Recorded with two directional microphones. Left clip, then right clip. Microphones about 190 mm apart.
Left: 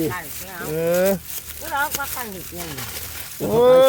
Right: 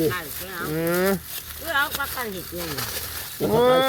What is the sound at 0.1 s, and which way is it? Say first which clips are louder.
Cattle: right 1 dB; 50° left (ahead or behind).